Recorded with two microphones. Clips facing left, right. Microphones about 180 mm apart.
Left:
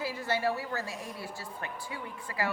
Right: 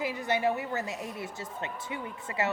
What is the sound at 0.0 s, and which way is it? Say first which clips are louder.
A woman's voice: right 2 dB; 20° right (ahead or behind).